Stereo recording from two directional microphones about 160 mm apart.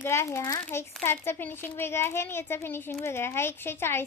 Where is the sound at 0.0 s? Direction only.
15° left (ahead or behind).